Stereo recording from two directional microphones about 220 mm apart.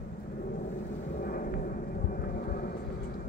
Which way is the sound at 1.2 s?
40° left (ahead or behind).